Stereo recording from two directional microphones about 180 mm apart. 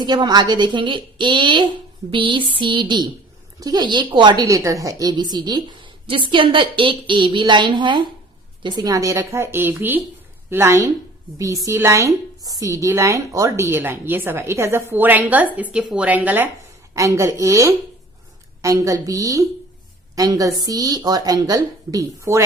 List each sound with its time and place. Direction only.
0.0 s a woman's voice: 25° right (ahead or behind)